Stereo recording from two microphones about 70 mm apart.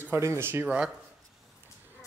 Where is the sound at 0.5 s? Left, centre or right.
Centre.